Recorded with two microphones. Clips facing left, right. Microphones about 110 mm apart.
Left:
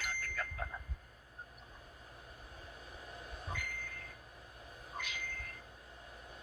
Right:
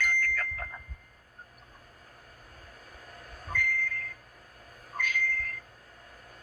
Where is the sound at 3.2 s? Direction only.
25° left (ahead or behind).